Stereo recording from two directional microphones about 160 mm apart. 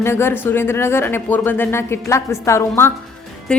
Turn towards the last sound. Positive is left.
turn(degrees=5)  # may be behind; listen again after turning